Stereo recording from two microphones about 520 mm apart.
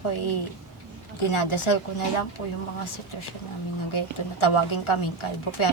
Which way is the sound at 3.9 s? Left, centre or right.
Left.